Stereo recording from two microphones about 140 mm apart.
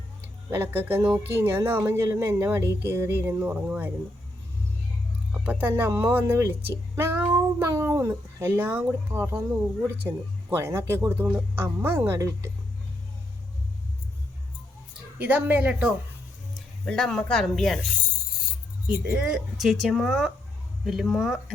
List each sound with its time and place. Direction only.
0.5 s speech: 15° right (ahead or behind)
5.3 s speech: 10° right (ahead or behind)
15.2 s speech: 10° right (ahead or behind)
16.6 s speech: 5° left (ahead or behind)
18.9 s speech: 10° right (ahead or behind)